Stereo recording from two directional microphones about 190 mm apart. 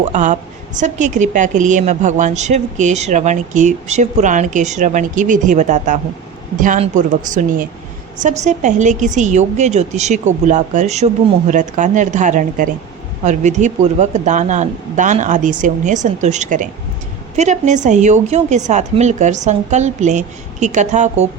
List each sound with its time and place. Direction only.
0.0 s a woman's voice: 40° right (ahead or behind)